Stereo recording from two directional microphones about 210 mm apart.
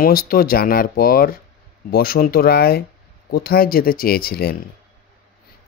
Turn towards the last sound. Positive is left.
turn(degrees=50)  # may be behind; listen again after turning